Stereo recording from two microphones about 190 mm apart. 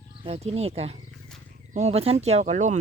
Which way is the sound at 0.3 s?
35° right (ahead or behind).